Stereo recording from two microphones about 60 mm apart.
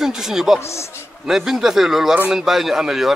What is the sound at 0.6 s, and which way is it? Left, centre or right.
Speech, left.